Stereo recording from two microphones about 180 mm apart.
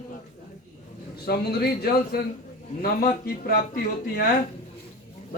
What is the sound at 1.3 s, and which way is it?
Speech, 60° left (ahead or behind).